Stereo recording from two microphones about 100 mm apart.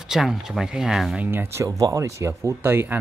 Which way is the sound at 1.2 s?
20° right (ahead or behind).